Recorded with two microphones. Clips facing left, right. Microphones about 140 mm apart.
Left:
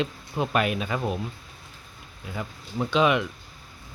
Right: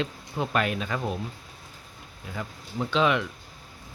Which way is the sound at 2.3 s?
15° left (ahead or behind).